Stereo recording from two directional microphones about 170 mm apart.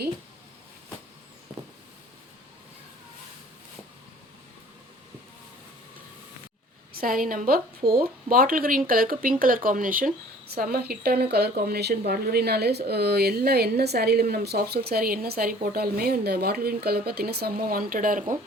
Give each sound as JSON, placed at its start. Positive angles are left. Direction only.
{"t": 6.9, "sound": "speech", "side_deg": -60}